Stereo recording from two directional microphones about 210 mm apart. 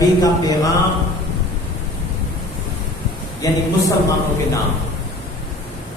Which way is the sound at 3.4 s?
15° left (ahead or behind).